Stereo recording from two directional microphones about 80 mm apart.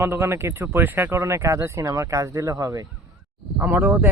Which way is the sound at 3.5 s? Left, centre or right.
Right.